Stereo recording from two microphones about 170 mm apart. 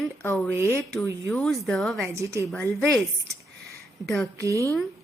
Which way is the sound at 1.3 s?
Centre (ahead or behind).